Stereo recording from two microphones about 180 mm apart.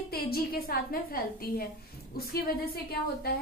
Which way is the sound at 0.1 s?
55° left (ahead or behind).